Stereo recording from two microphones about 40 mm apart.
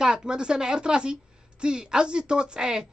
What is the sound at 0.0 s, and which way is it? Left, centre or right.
A woman's voice, centre.